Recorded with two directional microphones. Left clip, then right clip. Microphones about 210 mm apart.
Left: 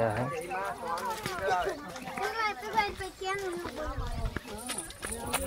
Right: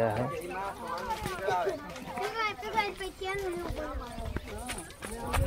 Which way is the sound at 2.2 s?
35° right (ahead or behind).